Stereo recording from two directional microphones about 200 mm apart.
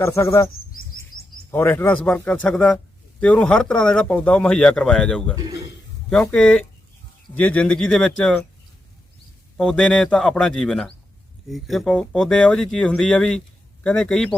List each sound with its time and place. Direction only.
0.0 s a man's voice: 15° left (ahead or behind)
1.5 s a man's voice: 10° left (ahead or behind)
9.6 s speech: 5° left (ahead or behind)